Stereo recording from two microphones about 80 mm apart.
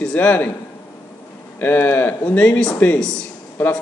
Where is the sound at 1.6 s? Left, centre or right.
Left; by 3.3 s centre.